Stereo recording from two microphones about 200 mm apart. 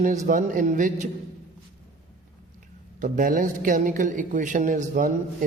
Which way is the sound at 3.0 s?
40° right (ahead or behind).